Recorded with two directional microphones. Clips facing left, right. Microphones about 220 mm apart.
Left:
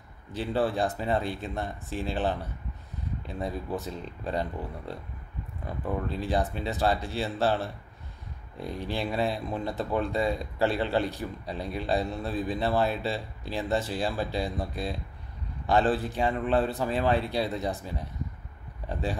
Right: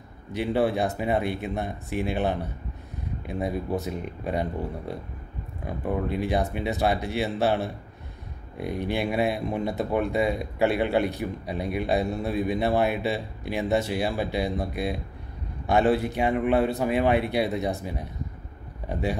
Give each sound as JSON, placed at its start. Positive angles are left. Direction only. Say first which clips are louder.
{"t": 0.3, "sound": "a man's voice", "louder": "right 4 dB", "side_deg": -15}
{"t": 8.9, "sound": "a man's voice", "louder": "right 3 dB", "side_deg": -10}
{"t": 18.9, "sound": "speech", "louder": "right 4 dB", "side_deg": -10}